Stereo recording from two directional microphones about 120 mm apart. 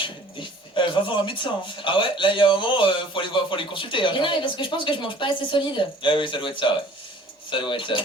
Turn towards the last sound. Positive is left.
turn(degrees=45)  # may be behind; listen again after turning